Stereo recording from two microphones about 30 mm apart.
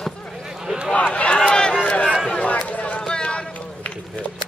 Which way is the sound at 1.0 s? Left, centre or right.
Left.